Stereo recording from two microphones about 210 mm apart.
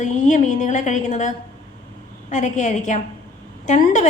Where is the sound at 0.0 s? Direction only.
35° left (ahead or behind).